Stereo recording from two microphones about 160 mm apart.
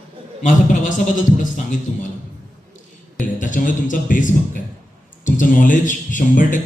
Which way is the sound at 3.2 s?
55° left (ahead or behind).